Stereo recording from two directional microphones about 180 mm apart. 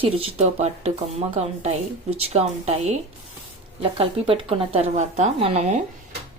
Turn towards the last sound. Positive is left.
turn(degrees=-35)  # may be behind; listen again after turning